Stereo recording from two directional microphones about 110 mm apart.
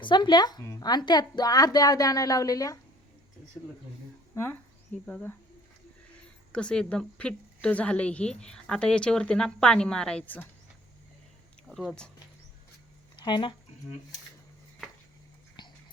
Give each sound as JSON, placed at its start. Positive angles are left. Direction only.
{"t": 0.0, "sound": "speech", "side_deg": 45}
{"t": 6.5, "sound": "a woman's voice", "side_deg": 10}
{"t": 13.1, "sound": "speech", "side_deg": 45}
{"t": 15.6, "sound": "music", "side_deg": 40}